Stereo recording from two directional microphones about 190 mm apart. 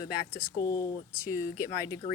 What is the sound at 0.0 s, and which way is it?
A woman's voice, 20° left (ahead or behind).